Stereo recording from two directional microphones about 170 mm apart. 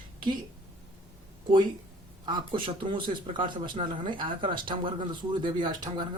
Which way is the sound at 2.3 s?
30° right (ahead or behind).